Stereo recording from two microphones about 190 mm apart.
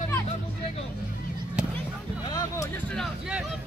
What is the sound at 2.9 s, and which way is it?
Vehicle, centre (ahead or behind).